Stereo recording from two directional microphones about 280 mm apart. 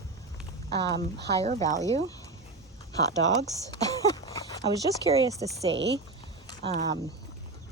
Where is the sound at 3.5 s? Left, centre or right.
Centre.